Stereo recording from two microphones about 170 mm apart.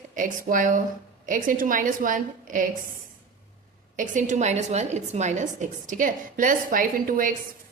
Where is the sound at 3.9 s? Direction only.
45° right (ahead or behind).